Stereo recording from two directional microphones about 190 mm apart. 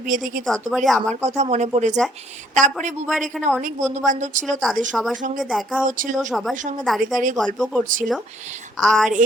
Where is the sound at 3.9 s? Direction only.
40° right (ahead or behind).